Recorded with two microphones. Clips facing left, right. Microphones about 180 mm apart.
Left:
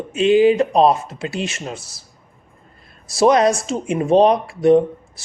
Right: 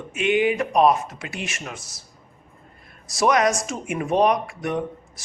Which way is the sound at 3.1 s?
30° left (ahead or behind).